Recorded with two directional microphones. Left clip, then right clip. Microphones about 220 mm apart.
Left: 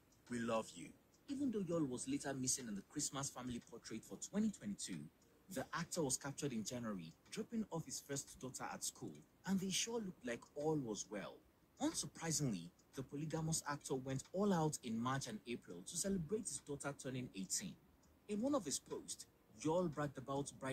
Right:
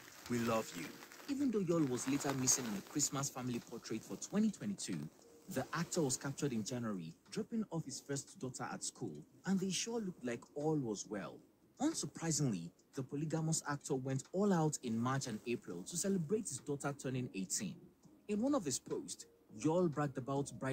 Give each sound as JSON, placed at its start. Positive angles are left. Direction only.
{"t": 0.3, "sound": "speech", "side_deg": -20}